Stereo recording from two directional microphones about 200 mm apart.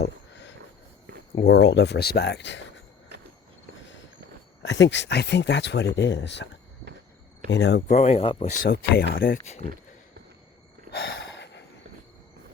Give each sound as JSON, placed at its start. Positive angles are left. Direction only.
{"t": 0.0, "sound": "a sound", "side_deg": 60}
{"t": 1.4, "sound": "speech", "side_deg": 60}
{"t": 4.6, "sound": "speech", "side_deg": 60}
{"t": 7.5, "sound": "speech", "side_deg": 60}
{"t": 7.9, "sound": "speech", "side_deg": 35}
{"t": 8.6, "sound": "speech", "side_deg": 50}
{"t": 10.9, "sound": "a sound", "side_deg": 55}